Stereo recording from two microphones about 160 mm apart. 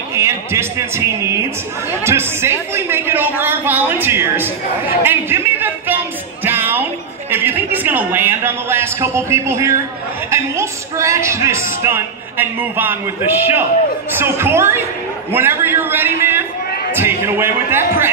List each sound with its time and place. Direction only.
0.1 s a man's voice: 15° right (ahead or behind)